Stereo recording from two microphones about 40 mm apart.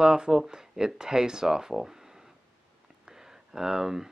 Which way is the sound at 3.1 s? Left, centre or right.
Centre.